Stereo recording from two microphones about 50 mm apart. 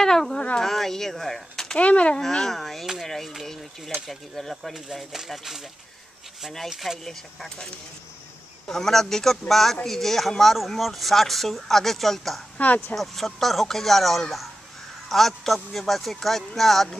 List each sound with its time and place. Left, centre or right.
0.0 s a sound: centre
0.6 s speech: centre
1.8 s a child's voice: left
2.2 s speech: centre
4.7 s speech: centre
7.1 s speech: centre
8.6 s speech: centre
12.5 s speech: left
12.9 s speech: centre